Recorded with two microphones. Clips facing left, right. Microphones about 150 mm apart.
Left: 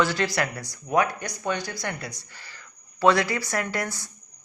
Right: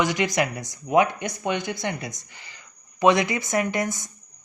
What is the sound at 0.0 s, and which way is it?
Speech, 15° right (ahead or behind).